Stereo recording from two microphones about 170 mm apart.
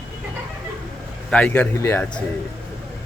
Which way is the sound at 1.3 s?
5° left (ahead or behind).